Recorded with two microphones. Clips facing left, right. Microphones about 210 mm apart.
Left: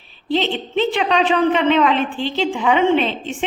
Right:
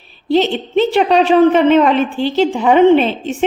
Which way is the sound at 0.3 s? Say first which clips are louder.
Right 6 dB; 45° right (ahead or behind).